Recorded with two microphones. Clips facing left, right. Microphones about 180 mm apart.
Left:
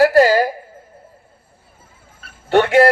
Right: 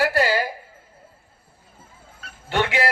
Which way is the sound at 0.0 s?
40° left (ahead or behind).